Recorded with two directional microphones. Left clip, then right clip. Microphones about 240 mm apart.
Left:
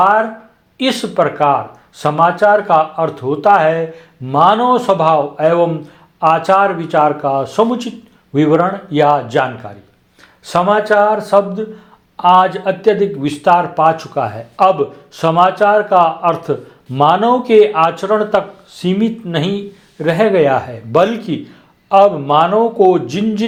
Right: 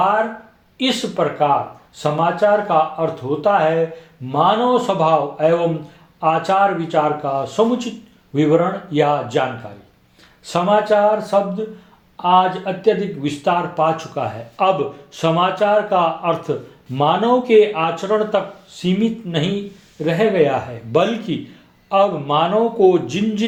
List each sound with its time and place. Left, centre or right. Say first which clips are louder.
0.8 s speech: left 5 dB; left
10.4 s speech: left 3 dB; left